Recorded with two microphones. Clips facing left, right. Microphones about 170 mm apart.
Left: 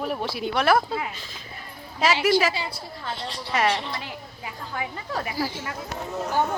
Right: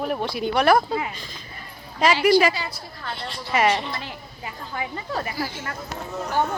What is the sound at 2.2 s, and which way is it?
Speech, 5° left (ahead or behind).